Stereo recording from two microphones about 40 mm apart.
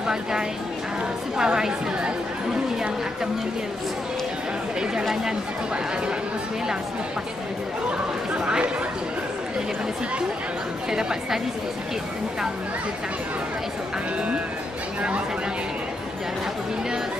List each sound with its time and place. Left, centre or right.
0.0 s a woman's voice: centre
5.0 s speech: centre
8.5 s a woman's voice: right
10.9 s speech: centre
15.0 s speech: right